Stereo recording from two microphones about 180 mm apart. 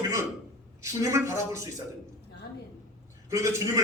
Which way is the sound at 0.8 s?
15° right (ahead or behind).